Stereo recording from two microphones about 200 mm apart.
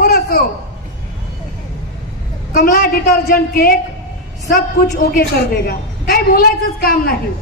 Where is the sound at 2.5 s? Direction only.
50° left (ahead or behind).